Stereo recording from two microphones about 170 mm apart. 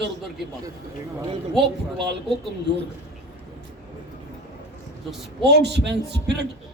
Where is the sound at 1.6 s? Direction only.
90° right.